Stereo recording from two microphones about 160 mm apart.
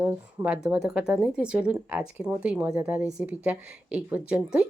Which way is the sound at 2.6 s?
20° right (ahead or behind).